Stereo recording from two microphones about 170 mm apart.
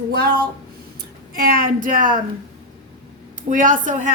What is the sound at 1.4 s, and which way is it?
Speech, 60° right (ahead or behind).